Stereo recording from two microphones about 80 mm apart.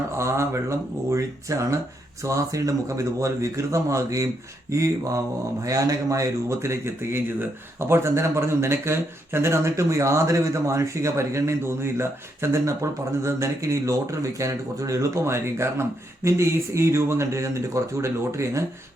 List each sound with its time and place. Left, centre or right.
0.2 s a man's voice: right